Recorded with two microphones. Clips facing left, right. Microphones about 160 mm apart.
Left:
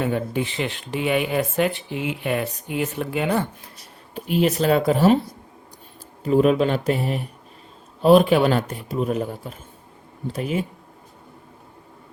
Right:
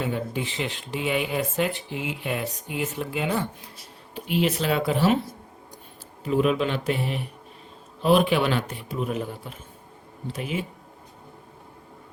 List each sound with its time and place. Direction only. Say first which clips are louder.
0.0 s speech: left 5 dB; 55° left (ahead or behind)
4.1 s speech: left 4 dB; 45° left (ahead or behind)
6.2 s a man's voice: left 5 dB; 40° left (ahead or behind)